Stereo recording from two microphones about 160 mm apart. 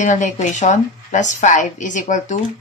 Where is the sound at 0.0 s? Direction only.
50° left (ahead or behind).